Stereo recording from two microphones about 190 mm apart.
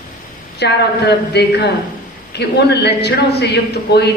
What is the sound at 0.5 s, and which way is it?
A woman's voice, 60° left (ahead or behind).